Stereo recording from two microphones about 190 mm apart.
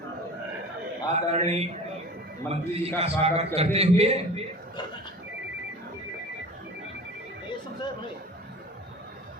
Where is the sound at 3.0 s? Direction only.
30° right (ahead or behind).